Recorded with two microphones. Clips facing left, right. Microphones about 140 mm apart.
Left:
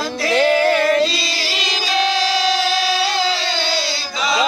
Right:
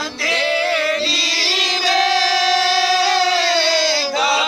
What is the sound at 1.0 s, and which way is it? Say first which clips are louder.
Music: left 1 dB; 90° right.